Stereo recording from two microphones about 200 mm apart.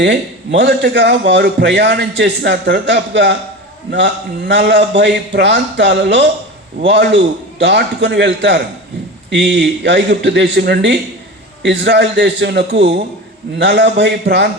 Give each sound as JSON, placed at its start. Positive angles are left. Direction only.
{"t": 0.0, "sound": "a man's voice", "side_deg": -60}